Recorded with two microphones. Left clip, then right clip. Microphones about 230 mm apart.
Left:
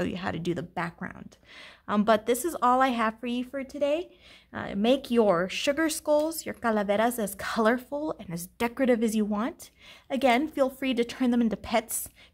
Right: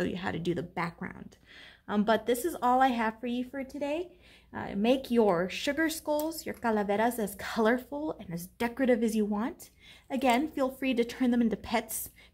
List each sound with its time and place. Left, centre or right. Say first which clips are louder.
0.0 s a woman's voice: left 2 dB; left